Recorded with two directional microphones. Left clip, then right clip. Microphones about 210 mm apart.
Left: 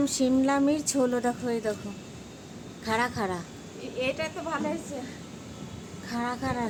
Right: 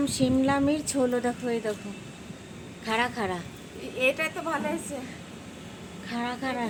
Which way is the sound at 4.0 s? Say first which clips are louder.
Right 4 dB; 50° right (ahead or behind).